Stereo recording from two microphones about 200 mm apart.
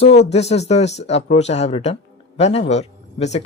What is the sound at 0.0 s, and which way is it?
Speech, 30° left (ahead or behind).